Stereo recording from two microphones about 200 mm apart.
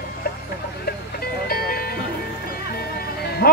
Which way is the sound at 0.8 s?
50° left (ahead or behind).